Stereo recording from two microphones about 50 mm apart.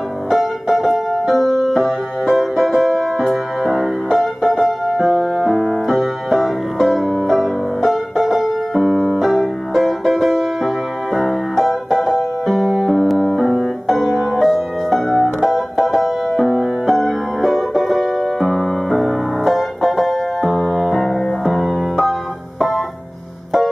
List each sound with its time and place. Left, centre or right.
0.3 s music: centre
8.8 s piano: centre
11.1 s music: centre
18.2 s piano: centre
20.8 s music: centre